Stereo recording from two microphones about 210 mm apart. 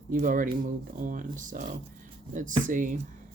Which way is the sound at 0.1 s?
40° right (ahead or behind).